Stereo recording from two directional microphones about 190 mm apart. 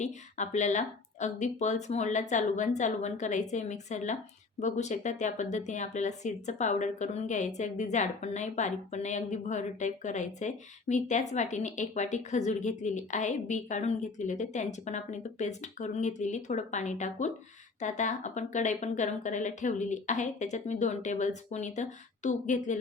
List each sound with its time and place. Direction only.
0.0 s speech: 40° left (ahead or behind)